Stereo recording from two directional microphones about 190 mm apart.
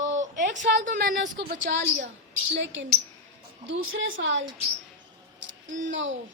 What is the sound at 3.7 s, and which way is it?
Speech, 90° right.